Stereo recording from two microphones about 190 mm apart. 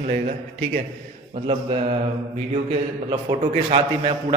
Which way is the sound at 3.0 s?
30° right (ahead or behind).